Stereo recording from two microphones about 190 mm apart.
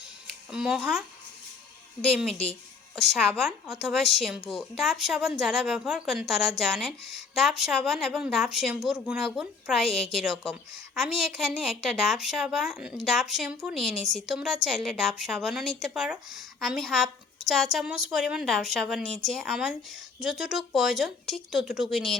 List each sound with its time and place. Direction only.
0.5 s a woman's voice: 5° right (ahead or behind)
2.9 s a woman's voice: centre (ahead or behind)
9.8 s a woman's voice: 30° left (ahead or behind)
10.1 s a woman's voice: centre (ahead or behind)